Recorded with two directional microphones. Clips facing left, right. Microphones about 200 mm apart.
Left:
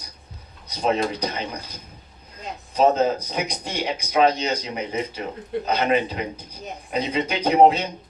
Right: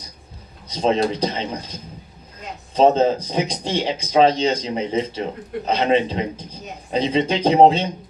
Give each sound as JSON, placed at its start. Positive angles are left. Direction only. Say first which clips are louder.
{"t": 0.7, "sound": "speech", "louder": "right 4 dB", "side_deg": -30}
{"t": 2.7, "sound": "speech", "louder": "right 3 dB", "side_deg": -30}